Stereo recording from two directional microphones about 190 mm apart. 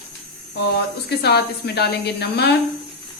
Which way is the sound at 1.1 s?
60° left (ahead or behind).